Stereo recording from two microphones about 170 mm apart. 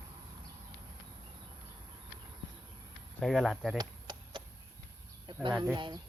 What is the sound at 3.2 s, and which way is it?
Speech, centre (ahead or behind).